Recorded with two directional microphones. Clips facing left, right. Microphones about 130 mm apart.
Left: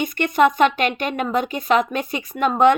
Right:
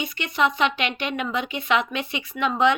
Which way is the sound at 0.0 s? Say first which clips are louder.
Left 7 dB; 50° left (ahead or behind).